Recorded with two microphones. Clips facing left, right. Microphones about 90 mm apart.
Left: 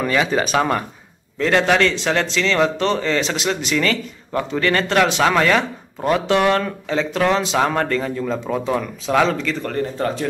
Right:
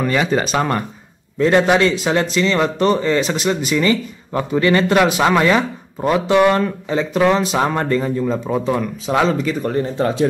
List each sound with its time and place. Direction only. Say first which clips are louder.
0.0 s a man's voice: right 1 dB; centre (ahead or behind)
9.7 s speech: right 3 dB; 25° right (ahead or behind)